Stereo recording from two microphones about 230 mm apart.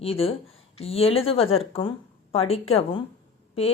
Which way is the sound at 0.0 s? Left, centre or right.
Left.